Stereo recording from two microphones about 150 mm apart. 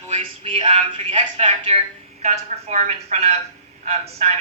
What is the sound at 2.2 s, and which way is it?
A man's voice, 50° right (ahead or behind).